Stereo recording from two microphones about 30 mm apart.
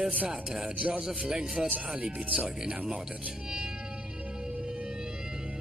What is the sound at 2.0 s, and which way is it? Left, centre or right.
Speech, right.